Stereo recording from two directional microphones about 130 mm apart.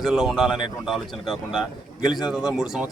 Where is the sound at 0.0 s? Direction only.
Centre (ahead or behind).